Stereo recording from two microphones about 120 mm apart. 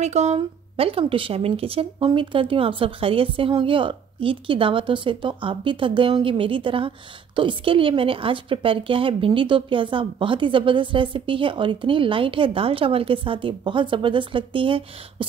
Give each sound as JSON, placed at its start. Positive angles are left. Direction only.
{"t": 0.0, "sound": "speech", "side_deg": -65}
{"t": 0.4, "sound": "a woman's voice", "side_deg": -50}